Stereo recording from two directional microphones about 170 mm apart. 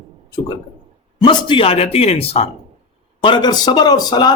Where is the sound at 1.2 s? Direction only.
25° left (ahead or behind).